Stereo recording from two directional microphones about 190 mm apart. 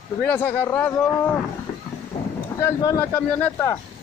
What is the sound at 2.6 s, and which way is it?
Speech, 15° left (ahead or behind).